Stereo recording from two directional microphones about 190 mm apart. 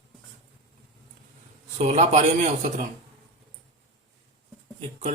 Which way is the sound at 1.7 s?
35° right (ahead or behind).